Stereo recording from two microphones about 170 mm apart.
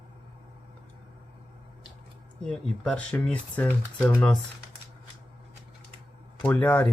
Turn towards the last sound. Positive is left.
turn(degrees=10)  # may be behind; listen again after turning